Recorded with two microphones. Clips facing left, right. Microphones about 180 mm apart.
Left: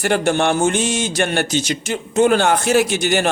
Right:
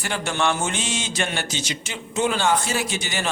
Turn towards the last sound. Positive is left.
turn(degrees=70)  # may be behind; listen again after turning